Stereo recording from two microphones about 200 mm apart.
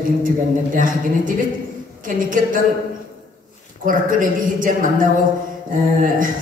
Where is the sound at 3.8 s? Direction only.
40° right (ahead or behind).